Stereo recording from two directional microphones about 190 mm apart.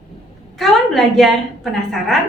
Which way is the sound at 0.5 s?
Centre (ahead or behind).